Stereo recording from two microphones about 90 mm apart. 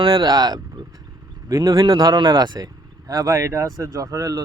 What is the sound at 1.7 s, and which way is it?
Speech, 60° right (ahead or behind).